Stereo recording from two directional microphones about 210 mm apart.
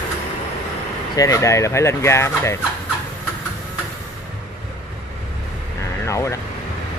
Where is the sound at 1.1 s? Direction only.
15° left (ahead or behind).